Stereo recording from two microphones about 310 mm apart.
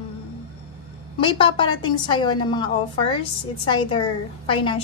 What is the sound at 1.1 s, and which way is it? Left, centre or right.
A woman's voice, centre.